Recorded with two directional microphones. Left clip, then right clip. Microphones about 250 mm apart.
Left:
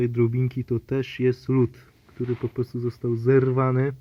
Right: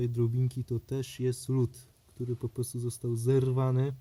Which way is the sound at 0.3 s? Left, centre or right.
Centre.